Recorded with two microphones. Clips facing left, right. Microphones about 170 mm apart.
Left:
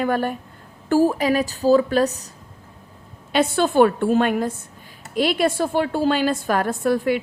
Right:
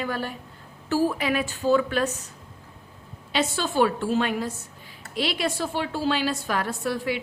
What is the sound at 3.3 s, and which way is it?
A woman's voice, 55° left (ahead or behind).